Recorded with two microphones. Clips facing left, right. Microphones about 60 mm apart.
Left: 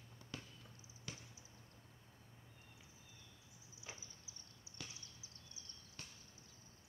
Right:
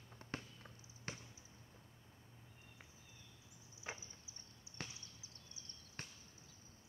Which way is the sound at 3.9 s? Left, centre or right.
Right.